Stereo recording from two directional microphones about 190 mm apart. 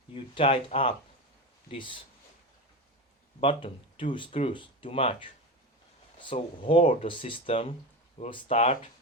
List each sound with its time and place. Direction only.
0.3 s speech: 30° left (ahead or behind)
3.4 s speech: 25° left (ahead or behind)